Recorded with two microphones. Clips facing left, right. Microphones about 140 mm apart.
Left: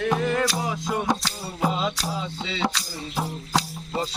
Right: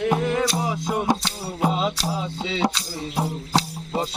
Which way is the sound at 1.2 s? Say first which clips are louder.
Right 2 dB; 25° right (ahead or behind).